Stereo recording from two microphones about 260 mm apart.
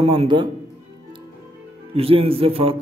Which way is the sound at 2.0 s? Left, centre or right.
Right.